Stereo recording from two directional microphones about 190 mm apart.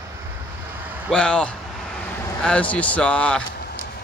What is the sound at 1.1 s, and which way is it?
Speech, 5° left (ahead or behind).